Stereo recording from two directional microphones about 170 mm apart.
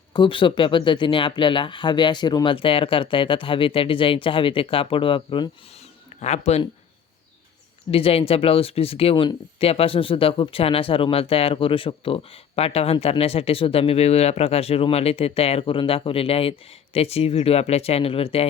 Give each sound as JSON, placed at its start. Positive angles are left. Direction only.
{"t": 0.1, "sound": "speech", "side_deg": 30}
{"t": 6.1, "sound": "speech", "side_deg": 40}
{"t": 7.9, "sound": "speech", "side_deg": 35}